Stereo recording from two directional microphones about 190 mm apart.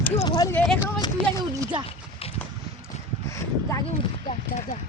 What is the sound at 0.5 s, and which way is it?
Speech, 10° left (ahead or behind).